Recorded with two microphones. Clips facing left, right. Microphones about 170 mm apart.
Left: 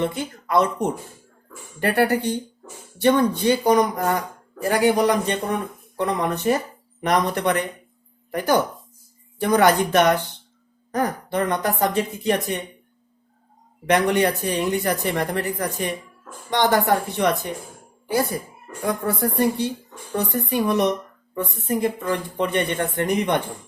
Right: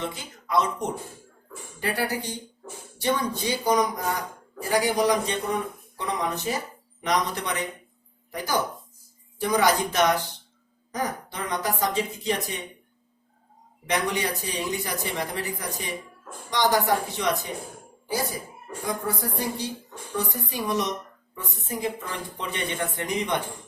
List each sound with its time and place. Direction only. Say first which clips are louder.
0.0 s speech: left 9 dB; 60° left (ahead or behind)
13.8 s speech: left 8 dB; 60° left (ahead or behind)